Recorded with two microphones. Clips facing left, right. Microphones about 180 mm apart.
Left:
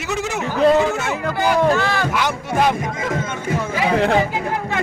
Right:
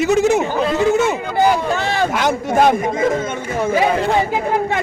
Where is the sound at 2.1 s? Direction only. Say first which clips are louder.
Right 3 dB; 45° right (ahead or behind).